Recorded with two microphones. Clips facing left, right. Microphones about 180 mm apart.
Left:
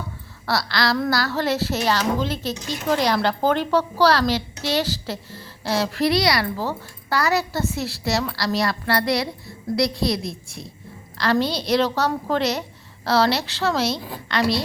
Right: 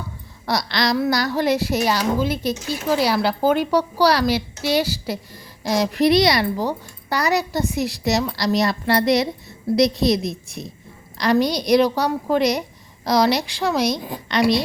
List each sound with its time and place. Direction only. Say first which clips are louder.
0.4 s a woman's voice: right 1 dB; 20° right (ahead or behind)